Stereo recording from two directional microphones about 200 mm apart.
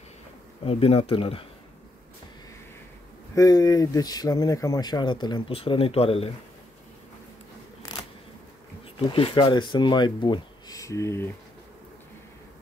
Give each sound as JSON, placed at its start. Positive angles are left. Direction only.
{"t": 0.7, "sound": "speech", "side_deg": 30}
{"t": 3.3, "sound": "speech", "side_deg": 20}
{"t": 7.9, "sound": "camera", "side_deg": 20}
{"t": 8.9, "sound": "speech", "side_deg": 25}